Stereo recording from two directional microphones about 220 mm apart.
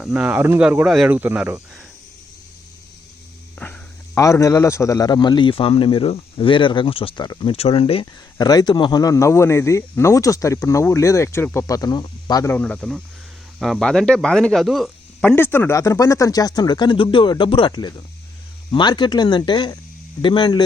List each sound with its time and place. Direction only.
0.0 s speech: 5° right (ahead or behind)
3.6 s a man's voice: 10° left (ahead or behind)